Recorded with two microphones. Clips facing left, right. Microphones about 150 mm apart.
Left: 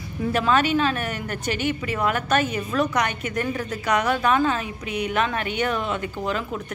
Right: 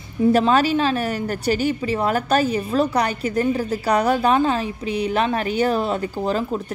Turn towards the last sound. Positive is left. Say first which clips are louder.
# right 5 dB
turn(degrees=-35)  # may be behind; listen again after turning